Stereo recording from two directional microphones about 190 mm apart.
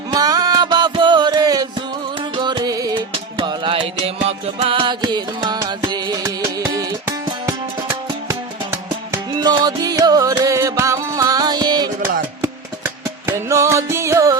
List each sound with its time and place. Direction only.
0.1 s music: 20° right (ahead or behind)